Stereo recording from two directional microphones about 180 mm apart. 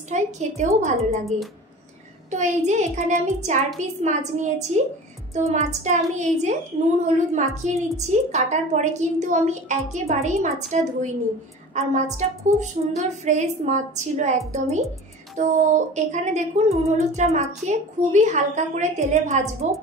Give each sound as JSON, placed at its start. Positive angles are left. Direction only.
{"t": 0.1, "sound": "a woman's voice", "side_deg": -40}
{"t": 2.3, "sound": "a woman's voice", "side_deg": -40}